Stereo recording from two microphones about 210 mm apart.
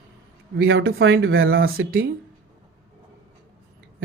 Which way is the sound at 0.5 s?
70° right (ahead or behind).